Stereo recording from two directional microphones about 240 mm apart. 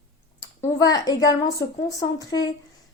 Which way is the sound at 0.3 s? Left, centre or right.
Centre.